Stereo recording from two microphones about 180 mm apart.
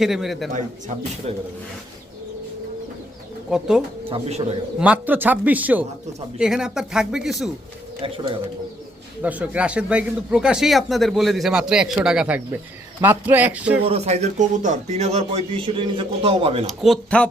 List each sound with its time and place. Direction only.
0.0 s speech: centre (ahead or behind)
3.5 s speech: 5° right (ahead or behind)
4.1 s a man's voice: 35° right (ahead or behind)
4.8 s a man's voice: 10° right (ahead or behind)
8.0 s speech: 30° right (ahead or behind)
9.2 s a man's voice: 10° right (ahead or behind)
13.8 s a man's voice: 35° right (ahead or behind)
16.6 s speech: centre (ahead or behind)